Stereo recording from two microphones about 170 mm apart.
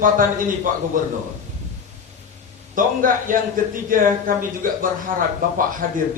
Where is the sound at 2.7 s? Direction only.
50° right (ahead or behind).